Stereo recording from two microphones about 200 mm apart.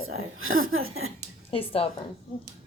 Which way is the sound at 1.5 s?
30° left (ahead or behind).